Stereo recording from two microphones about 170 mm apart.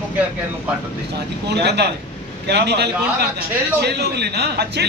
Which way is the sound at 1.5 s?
75° right (ahead or behind).